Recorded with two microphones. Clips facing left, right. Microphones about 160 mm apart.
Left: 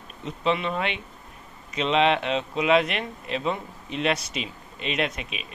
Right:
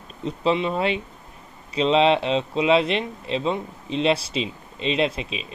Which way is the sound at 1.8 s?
30° right (ahead or behind).